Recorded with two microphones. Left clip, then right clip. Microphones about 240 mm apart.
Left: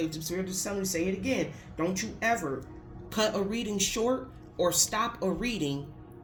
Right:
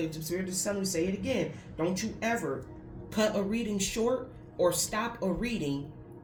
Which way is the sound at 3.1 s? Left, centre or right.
Left.